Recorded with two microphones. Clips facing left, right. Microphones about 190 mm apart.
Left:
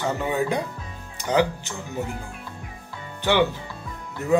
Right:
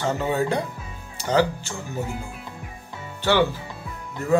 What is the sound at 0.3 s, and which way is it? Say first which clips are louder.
Speech: right 1 dB; 15° left (ahead or behind).